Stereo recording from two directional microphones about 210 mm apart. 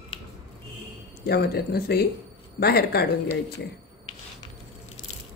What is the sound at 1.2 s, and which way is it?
Speech, 50° left (ahead or behind).